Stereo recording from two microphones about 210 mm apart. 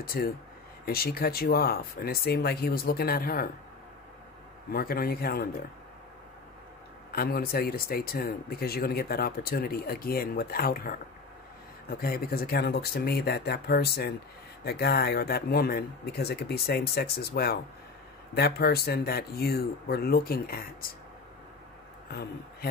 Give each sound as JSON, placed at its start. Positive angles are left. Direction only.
{"t": 0.2, "sound": "speech", "side_deg": 45}
{"t": 4.7, "sound": "speech", "side_deg": 45}
{"t": 7.1, "sound": "speech", "side_deg": 45}